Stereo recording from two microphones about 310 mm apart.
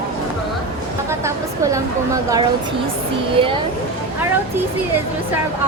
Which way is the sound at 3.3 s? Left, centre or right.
Centre.